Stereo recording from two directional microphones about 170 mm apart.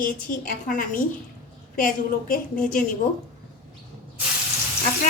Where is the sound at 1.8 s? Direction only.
55° left (ahead or behind).